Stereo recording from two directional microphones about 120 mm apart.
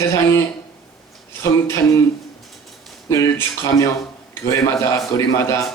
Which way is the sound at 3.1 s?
25° left (ahead or behind).